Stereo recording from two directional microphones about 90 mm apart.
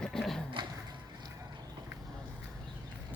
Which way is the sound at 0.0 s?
5° left (ahead or behind).